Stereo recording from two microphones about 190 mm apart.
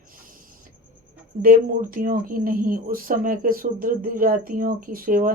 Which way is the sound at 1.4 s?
50° right (ahead or behind).